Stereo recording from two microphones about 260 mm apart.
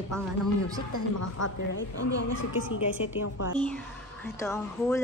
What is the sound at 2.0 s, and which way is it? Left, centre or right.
Speech, left.